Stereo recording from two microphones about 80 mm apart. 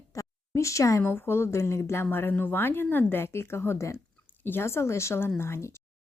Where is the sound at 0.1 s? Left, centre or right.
Left.